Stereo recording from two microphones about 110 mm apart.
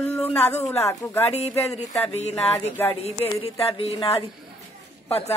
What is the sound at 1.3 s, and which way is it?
Speech, 75° left (ahead or behind).